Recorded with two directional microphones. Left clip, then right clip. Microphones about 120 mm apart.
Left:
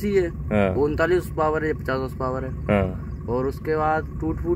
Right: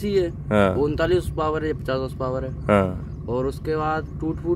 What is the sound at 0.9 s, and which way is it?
Speech, 10° right (ahead or behind).